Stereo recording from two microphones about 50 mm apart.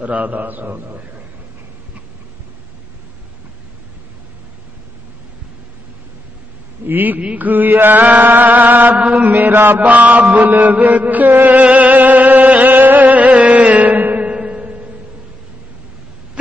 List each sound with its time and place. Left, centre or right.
0.0 s mantra: right
6.9 s mantra: right
10.3 s chant: right
14.3 s music: right